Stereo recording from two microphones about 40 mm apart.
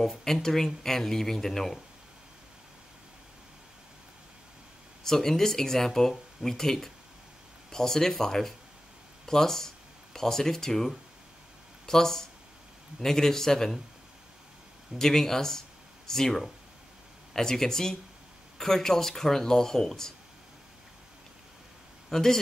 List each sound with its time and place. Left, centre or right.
0.2 s speech: centre
5.0 s speech: centre
15.0 s speech: centre
22.1 s speech: centre